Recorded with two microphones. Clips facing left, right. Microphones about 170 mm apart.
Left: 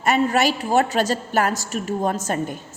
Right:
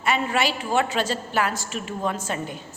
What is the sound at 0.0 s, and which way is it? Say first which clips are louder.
A woman's voice: left 5 dB; 40° left (ahead or behind).